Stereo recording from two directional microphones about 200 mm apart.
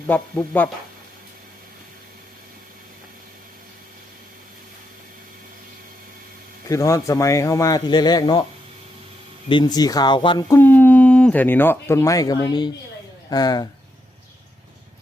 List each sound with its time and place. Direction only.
0.1 s speech: 10° left (ahead or behind)
6.7 s speech: 15° left (ahead or behind)
9.5 s speech: 20° left (ahead or behind)
10.6 s speech: 10° left (ahead or behind)